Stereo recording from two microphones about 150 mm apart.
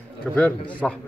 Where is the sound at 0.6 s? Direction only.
10° left (ahead or behind).